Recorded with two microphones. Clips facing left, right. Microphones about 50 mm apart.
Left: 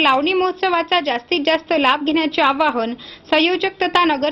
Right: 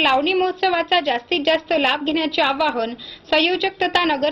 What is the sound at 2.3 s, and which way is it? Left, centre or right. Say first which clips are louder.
Speech: left 3 dB; centre.